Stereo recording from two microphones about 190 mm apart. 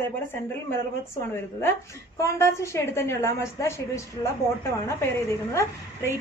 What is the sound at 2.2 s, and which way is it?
A man's voice, 15° left (ahead or behind).